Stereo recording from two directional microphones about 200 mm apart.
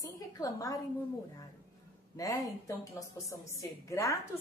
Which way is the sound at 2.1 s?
15° left (ahead or behind).